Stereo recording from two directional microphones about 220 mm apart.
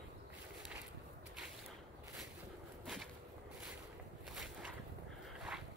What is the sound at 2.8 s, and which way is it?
Whip, centre (ahead or behind).